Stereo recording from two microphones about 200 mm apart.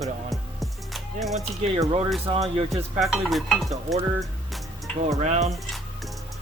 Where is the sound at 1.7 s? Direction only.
25° right (ahead or behind).